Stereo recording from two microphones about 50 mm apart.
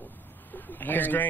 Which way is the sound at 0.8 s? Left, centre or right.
Left.